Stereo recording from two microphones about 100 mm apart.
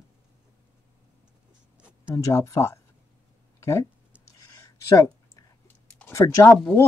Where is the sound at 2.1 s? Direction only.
30° left (ahead or behind).